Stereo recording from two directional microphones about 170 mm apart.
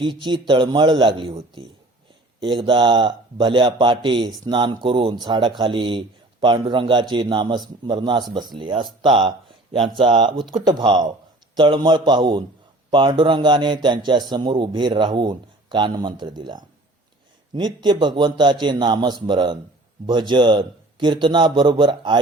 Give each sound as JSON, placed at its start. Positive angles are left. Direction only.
{"t": 0.0, "sound": "a man's voice", "side_deg": -30}